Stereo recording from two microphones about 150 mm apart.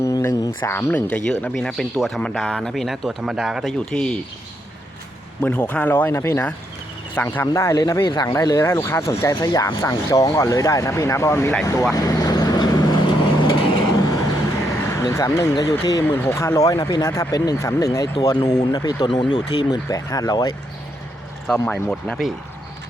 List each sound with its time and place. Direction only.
0.0 s speech: 20° left (ahead or behind); by 4.2 s 5° left (ahead or behind)
5.4 s a man's voice: 10° left (ahead or behind)
11.9 s vehicle: 25° left (ahead or behind)
14.7 s speech: 20° left (ahead or behind)
21.7 s speech: 5° left (ahead or behind)